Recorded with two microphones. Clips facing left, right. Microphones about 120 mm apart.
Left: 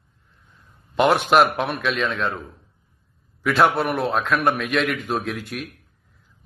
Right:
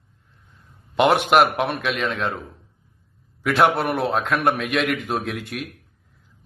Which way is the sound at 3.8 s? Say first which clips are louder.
Even; 25° right (ahead or behind).